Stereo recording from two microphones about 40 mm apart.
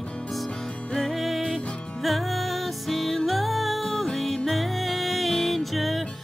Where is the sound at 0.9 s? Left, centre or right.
Centre.